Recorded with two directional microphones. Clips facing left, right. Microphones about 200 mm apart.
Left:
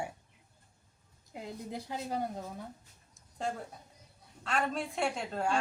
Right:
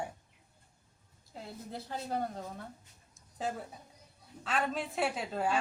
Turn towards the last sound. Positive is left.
turn(degrees=-5)  # may be behind; listen again after turning